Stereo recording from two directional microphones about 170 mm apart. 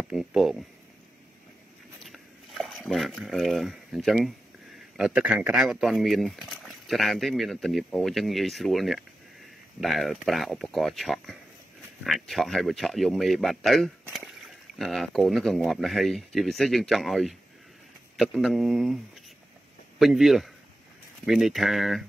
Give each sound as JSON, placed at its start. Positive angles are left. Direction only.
{"t": 0.1, "sound": "speech", "side_deg": -5}
{"t": 2.0, "sound": "a sound", "side_deg": 0}
{"t": 4.9, "sound": "speech", "side_deg": -5}
{"t": 20.0, "sound": "speech", "side_deg": 0}